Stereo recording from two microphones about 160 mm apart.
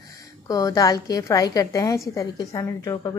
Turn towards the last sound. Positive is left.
turn(degrees=25)  # may be behind; listen again after turning